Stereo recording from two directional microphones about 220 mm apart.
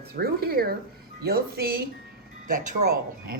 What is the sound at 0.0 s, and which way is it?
A woman's voice, 45° right (ahead or behind).